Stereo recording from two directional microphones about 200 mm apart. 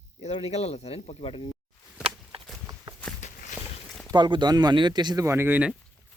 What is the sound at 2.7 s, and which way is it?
Walk, 15° right (ahead or behind).